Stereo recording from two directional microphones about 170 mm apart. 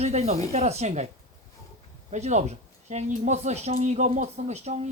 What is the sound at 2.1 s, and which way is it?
Speech, 40° right (ahead or behind).